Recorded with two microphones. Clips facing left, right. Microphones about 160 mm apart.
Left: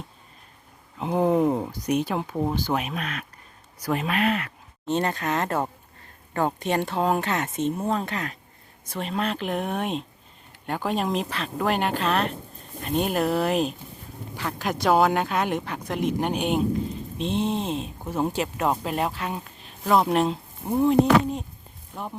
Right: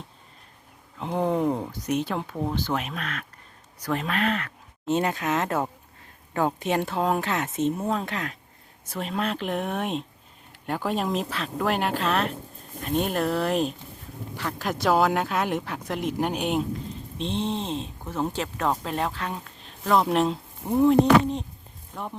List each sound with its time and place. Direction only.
0.9 s speech: 10° left (ahead or behind)
4.9 s speech: 5° right (ahead or behind)